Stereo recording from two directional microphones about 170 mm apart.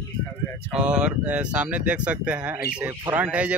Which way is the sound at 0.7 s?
5° right (ahead or behind).